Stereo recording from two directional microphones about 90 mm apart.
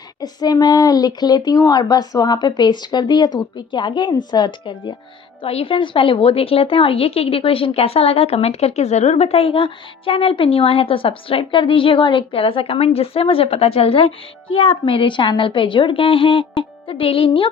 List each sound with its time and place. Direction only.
0.2 s speech: 50° left (ahead or behind); by 4.9 s 65° left (ahead or behind)
5.4 s speech: 90° left